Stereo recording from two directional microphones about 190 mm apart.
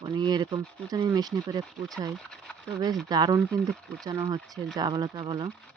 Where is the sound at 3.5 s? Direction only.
5° left (ahead or behind).